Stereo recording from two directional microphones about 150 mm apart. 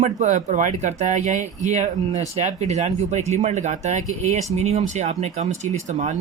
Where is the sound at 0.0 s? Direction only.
55° right (ahead or behind).